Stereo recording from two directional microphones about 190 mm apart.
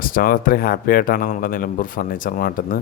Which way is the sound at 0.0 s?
50° left (ahead or behind).